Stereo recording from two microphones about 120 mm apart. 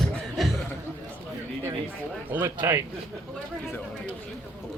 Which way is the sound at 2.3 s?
20° right (ahead or behind).